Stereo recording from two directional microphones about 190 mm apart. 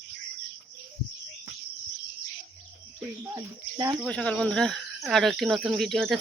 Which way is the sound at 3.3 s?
20° right (ahead or behind).